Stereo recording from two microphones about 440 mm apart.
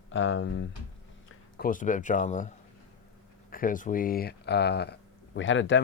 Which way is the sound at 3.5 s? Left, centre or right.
Centre.